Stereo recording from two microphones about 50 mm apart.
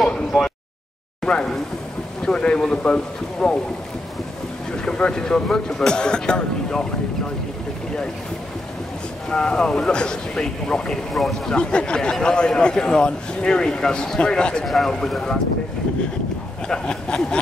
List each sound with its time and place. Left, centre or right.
0.3 s a sound: centre
1.2 s speech: centre
4.8 s speech: centre
9.3 s speech: centre
11.1 s speech: centre
11.5 s speech: centre
16.6 s speech: centre